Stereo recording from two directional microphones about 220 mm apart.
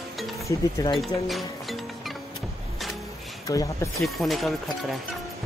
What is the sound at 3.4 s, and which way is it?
Speech, 15° left (ahead or behind).